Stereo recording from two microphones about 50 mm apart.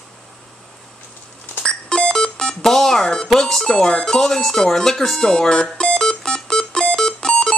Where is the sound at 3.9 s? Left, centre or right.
Centre.